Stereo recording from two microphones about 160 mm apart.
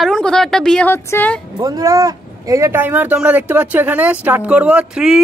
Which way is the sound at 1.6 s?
20° right (ahead or behind).